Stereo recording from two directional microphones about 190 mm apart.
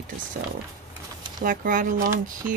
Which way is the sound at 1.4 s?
45° right (ahead or behind).